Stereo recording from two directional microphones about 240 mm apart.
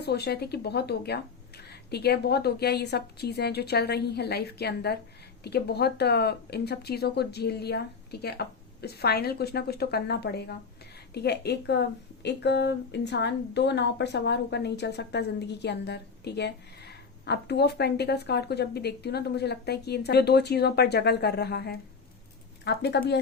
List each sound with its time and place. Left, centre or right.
0.0 s speech: left